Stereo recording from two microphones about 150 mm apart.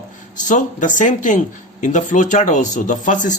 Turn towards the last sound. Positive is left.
turn(degrees=55)  # may be behind; listen again after turning